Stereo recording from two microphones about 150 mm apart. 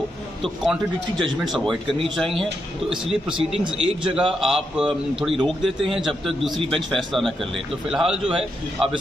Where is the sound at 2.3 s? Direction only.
Centre (ahead or behind).